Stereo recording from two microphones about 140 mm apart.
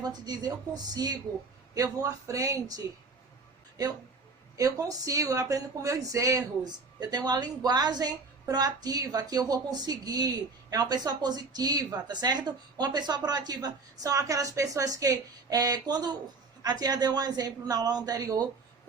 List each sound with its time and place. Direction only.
0.0 s speech: 30° right (ahead or behind)
4.5 s speech: 25° right (ahead or behind)